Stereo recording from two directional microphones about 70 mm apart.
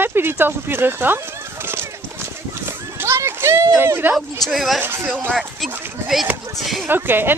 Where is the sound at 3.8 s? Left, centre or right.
Right.